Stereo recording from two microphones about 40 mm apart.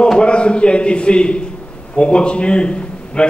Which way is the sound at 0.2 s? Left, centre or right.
Left.